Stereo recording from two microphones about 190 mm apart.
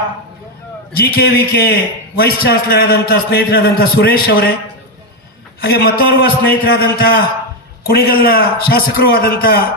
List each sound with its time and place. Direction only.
0.9 s a man's voice: 55° left (ahead or behind)
5.5 s a man's voice: 55° left (ahead or behind)